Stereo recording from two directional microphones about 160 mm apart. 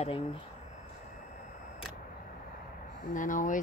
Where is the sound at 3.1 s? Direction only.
55° left (ahead or behind).